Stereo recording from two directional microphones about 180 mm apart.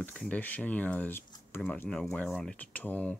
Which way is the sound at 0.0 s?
5° left (ahead or behind).